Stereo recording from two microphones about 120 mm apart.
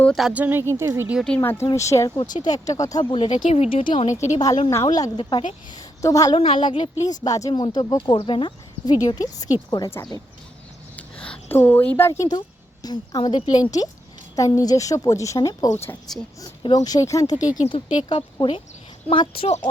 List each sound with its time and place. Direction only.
0.2 s speech: 10° right (ahead or behind)
1.4 s a woman's voice: 20° left (ahead or behind)
3.1 s speech: 40° left (ahead or behind)
3.3 s speech: 60° left (ahead or behind)
4.4 s speech: 35° left (ahead or behind)
6.0 s a woman's voice: 30° left (ahead or behind)
6.3 s speech: 45° left (ahead or behind)
7.0 s speech: 30° left (ahead or behind)
10.9 s a woman's voice: 10° left (ahead or behind); by 15.7 s 30° left (ahead or behind)
15.7 s a woman's voice: 20° left (ahead or behind)
16.7 s speech: 30° left (ahead or behind)
17.9 s speech: 45° left (ahead or behind)
19.5 s speech: 65° left (ahead or behind)